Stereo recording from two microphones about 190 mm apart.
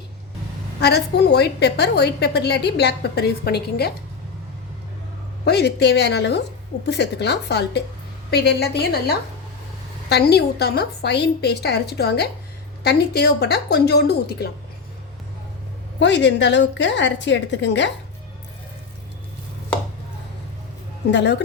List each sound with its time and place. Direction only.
0.8 s a woman's voice: 60° left (ahead or behind)
5.5 s a woman's voice: 60° left (ahead or behind)
16.0 s a woman's voice: 65° left (ahead or behind)
21.1 s a woman's voice: 65° left (ahead or behind)